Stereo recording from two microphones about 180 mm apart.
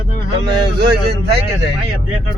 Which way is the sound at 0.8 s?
70° right (ahead or behind).